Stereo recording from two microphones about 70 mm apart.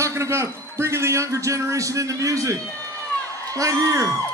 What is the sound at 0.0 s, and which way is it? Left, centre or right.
A man's voice, right.